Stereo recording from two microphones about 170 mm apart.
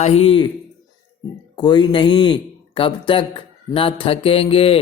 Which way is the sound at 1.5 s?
25° left (ahead or behind).